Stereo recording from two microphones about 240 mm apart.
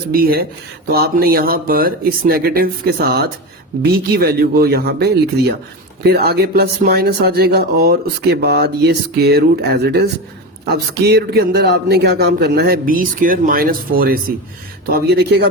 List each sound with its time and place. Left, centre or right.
0.1 s speech: right
3.8 s speech: right